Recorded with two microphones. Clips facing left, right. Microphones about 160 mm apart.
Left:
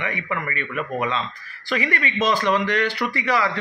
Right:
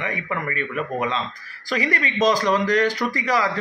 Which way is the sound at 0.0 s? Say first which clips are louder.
Even; 40° right (ahead or behind).